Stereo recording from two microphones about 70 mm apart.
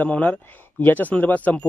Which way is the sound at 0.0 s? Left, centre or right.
Left.